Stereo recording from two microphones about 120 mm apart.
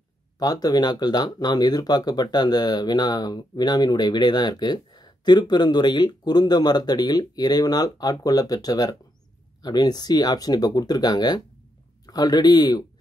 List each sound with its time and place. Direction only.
0.4 s speech: 30° left (ahead or behind)